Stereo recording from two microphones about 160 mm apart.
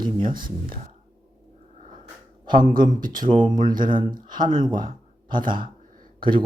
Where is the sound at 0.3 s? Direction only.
60° right (ahead or behind).